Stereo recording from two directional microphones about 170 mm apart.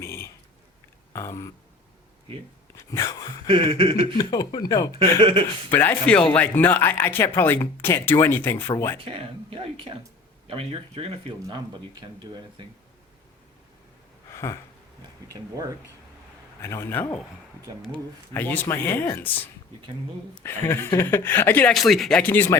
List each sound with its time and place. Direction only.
0.0 s a sound: 15° left (ahead or behind)
1.1 s speech: 15° left (ahead or behind)
2.7 s speech: 15° left (ahead or behind)
3.4 s speech: 30° right (ahead or behind)
4.2 s speech: 25° left (ahead or behind)
4.9 s speech: 30° right (ahead or behind)
5.7 s speech: 10° left (ahead or behind)
9.0 s speech: 30° right (ahead or behind)
14.3 s a sound: 15° left (ahead or behind)
15.3 s speech: 20° right (ahead or behind)
16.6 s speech: 15° left (ahead or behind)
20.4 s speech: 15° left (ahead or behind)